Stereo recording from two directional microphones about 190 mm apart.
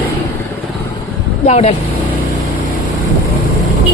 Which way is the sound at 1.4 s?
35° left (ahead or behind).